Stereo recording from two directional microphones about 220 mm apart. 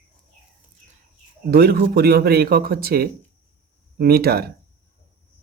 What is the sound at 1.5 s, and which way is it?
Speech, 45° right (ahead or behind).